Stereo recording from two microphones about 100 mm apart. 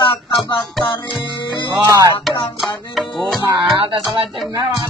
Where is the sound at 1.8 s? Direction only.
35° right (ahead or behind).